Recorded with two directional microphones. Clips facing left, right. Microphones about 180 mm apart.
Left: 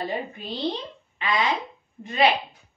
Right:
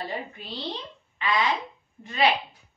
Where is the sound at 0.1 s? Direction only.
15° left (ahead or behind).